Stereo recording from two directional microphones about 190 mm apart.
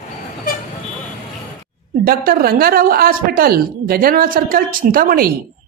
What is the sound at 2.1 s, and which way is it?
Speech, 50° right (ahead or behind).